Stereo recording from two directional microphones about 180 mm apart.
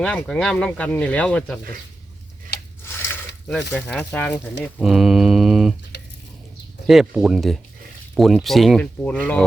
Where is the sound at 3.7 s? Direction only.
5° left (ahead or behind).